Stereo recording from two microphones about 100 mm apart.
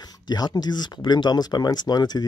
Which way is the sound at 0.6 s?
45° left (ahead or behind).